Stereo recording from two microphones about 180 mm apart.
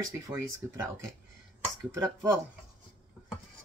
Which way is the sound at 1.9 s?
15° right (ahead or behind).